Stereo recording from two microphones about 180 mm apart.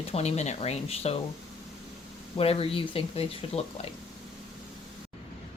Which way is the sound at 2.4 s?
30° left (ahead or behind).